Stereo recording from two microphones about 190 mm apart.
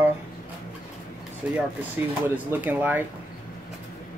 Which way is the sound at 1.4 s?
10° right (ahead or behind).